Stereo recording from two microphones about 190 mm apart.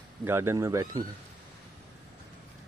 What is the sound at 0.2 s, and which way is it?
Speech, 15° right (ahead or behind).